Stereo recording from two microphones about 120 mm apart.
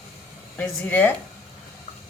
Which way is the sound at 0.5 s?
15° left (ahead or behind).